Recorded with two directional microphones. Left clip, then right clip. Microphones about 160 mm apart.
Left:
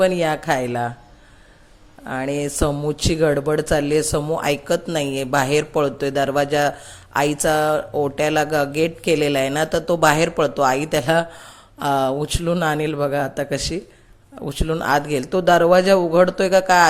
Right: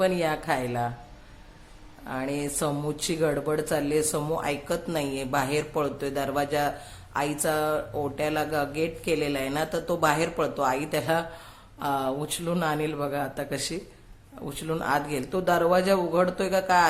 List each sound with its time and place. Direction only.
0.0 s speech: 35° left (ahead or behind)
2.0 s speech: 35° left (ahead or behind)